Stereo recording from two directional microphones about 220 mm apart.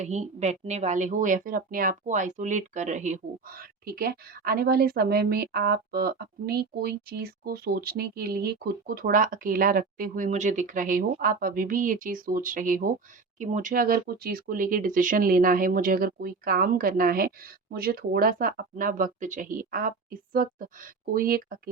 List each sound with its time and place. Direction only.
0.0 s a woman's voice: 30° right (ahead or behind)